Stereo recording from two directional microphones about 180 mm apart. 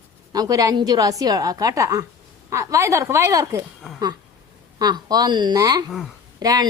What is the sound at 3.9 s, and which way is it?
Speech, centre (ahead or behind).